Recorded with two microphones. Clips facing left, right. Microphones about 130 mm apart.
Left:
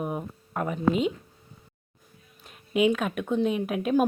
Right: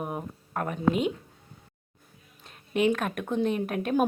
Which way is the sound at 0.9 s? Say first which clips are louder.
Even; 55° right (ahead or behind).